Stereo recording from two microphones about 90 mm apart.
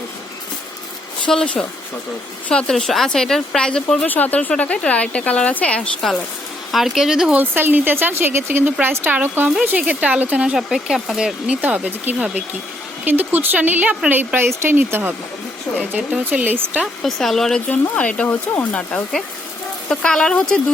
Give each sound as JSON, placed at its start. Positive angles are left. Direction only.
{"t": 1.3, "sound": "a woman's voice", "side_deg": 5}
{"t": 4.0, "sound": "a woman's voice", "side_deg": 20}
{"t": 7.5, "sound": "speech", "side_deg": -20}
{"t": 11.6, "sound": "speech", "side_deg": -15}
{"t": 16.8, "sound": "a woman's voice", "side_deg": 0}
{"t": 17.7, "sound": "speech", "side_deg": 15}